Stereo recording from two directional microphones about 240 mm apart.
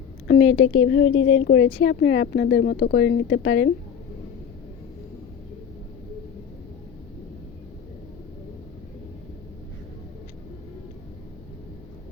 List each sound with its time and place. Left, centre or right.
0.3 s speech: left